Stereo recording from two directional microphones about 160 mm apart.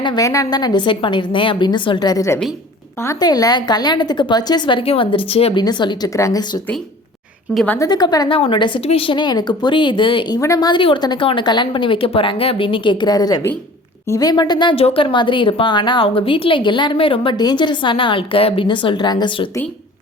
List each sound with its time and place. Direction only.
0.0 s a woman's voice: 25° left (ahead or behind)
7.5 s a woman's voice: 5° left (ahead or behind)
7.8 s a woman's voice: 25° left (ahead or behind)